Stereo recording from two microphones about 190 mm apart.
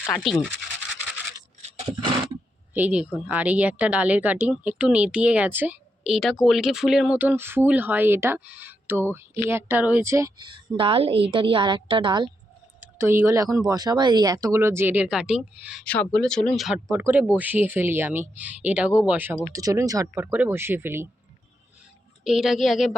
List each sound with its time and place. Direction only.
0.0 s speech: centre (ahead or behind)
1.8 s roaring cats: 25° right (ahead or behind)
2.7 s speech: 5° right (ahead or behind); by 12.3 s 25° right (ahead or behind)
13.0 s speech: 15° right (ahead or behind)
15.8 s speech: 5° left (ahead or behind); by 21.1 s 10° right (ahead or behind)
22.2 s speech: centre (ahead or behind)